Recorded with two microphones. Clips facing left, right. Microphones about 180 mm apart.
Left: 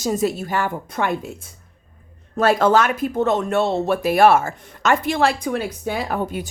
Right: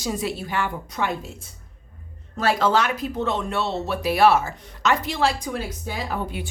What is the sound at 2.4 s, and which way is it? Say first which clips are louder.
Speech: left 5 dB; 50° left (ahead or behind).